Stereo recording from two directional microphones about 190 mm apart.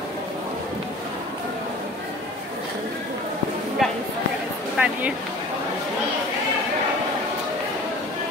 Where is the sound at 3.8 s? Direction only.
Centre (ahead or behind).